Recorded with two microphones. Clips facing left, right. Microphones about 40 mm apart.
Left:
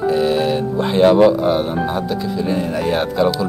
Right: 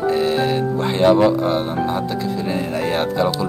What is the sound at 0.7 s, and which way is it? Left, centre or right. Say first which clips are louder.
Speech: left 3 dB; centre.